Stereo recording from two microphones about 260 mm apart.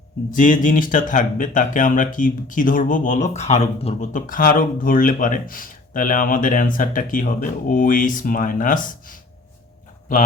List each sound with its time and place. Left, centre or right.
0.3 s speech: left